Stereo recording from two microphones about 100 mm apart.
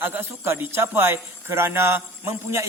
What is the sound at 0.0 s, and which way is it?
Speech, 25° right (ahead or behind).